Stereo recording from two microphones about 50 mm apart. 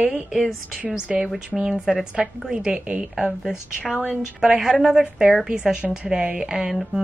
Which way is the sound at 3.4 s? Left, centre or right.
Centre.